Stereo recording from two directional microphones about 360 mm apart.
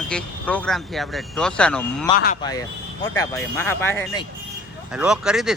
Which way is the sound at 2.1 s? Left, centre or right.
Left.